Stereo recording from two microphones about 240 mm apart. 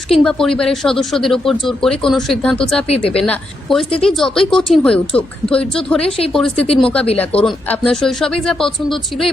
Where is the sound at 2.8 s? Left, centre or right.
Left.